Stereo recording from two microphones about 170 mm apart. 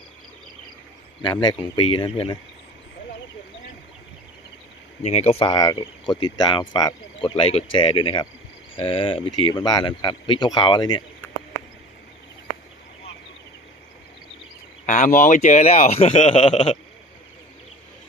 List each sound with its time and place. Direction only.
1.2 s speech: 25° left (ahead or behind)
5.0 s speech: 40° left (ahead or behind)
14.8 s a man's voice: 50° left (ahead or behind); by 16.6 s 30° left (ahead or behind)